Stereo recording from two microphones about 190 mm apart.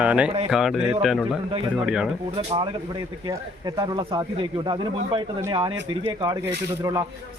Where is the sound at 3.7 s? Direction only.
20° right (ahead or behind).